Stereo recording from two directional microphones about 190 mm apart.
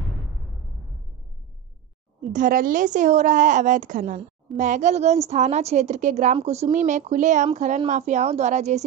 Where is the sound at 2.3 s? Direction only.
45° right (ahead or behind).